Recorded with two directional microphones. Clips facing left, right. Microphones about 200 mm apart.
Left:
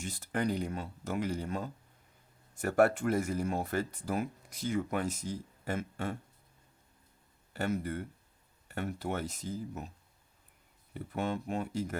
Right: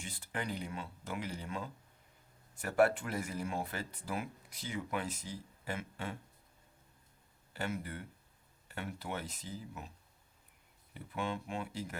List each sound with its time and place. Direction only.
0.0 s speech: 45° left (ahead or behind)
7.5 s speech: 45° left (ahead or behind)
10.9 s speech: 45° left (ahead or behind)